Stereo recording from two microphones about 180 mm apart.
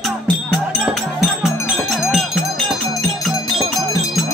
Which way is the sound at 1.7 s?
Centre (ahead or behind).